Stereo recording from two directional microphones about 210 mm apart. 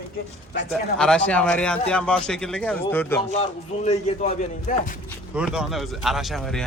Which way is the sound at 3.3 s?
30° left (ahead or behind).